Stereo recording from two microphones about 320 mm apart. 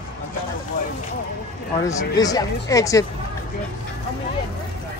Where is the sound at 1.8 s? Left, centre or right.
Centre.